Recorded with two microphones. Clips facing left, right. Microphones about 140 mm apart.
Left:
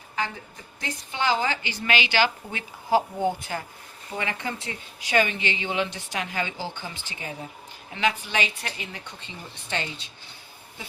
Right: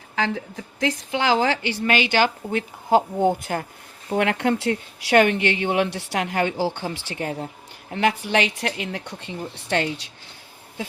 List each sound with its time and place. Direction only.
0.2 s a woman's voice: 90° right
1.9 s speech: 50° right (ahead or behind)
4.1 s speech: 65° right (ahead or behind)
7.9 s speech: 50° right (ahead or behind)
8.3 s speech: 65° right (ahead or behind)